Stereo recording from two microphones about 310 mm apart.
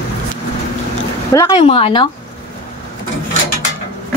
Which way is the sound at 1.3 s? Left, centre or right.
Centre.